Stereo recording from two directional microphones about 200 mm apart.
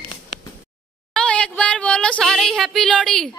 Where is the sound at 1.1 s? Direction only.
5° left (ahead or behind).